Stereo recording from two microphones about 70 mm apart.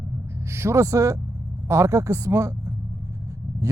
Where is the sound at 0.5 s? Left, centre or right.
Right.